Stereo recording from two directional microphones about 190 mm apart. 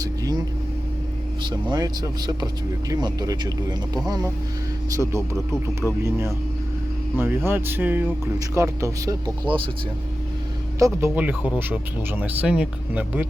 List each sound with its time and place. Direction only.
1.5 s speech: 25° right (ahead or behind)
10.8 s speech: 15° right (ahead or behind)